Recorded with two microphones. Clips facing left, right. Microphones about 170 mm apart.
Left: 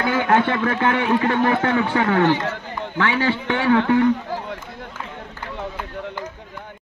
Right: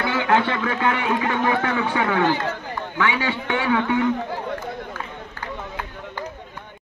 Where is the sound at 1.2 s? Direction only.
45° left (ahead or behind).